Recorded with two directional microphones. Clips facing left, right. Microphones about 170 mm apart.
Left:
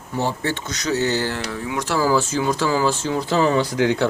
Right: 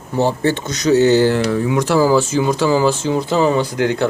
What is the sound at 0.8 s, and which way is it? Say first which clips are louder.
Speech: right 10 dB; 20° right (ahead or behind).